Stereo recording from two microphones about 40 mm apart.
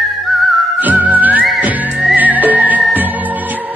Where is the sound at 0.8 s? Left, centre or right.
Right.